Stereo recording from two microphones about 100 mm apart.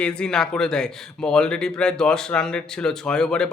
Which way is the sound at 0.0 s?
10° left (ahead or behind).